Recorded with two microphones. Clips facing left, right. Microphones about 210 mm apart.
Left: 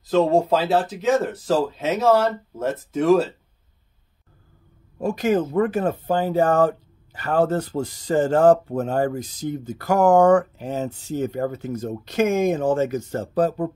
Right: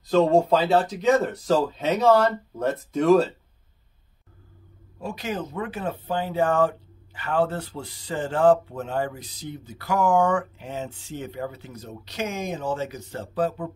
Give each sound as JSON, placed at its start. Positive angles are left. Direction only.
{"t": 0.0, "sound": "speech", "side_deg": 0}
{"t": 4.9, "sound": "speech", "side_deg": 45}